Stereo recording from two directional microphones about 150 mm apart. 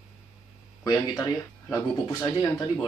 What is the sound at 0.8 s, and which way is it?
Speech, 20° left (ahead or behind).